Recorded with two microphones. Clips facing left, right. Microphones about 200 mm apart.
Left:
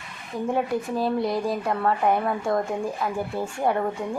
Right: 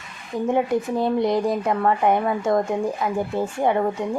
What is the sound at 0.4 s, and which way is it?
Speech, 20° right (ahead or behind).